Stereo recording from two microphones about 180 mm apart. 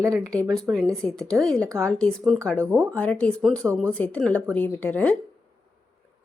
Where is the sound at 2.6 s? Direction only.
15° right (ahead or behind).